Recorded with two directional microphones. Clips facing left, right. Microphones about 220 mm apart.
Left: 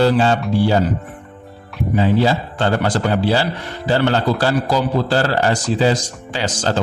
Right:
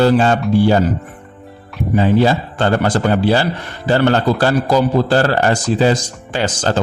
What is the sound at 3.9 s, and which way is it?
A man's voice, 50° right (ahead or behind).